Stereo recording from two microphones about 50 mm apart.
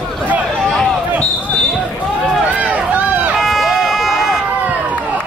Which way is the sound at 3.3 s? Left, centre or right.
Centre.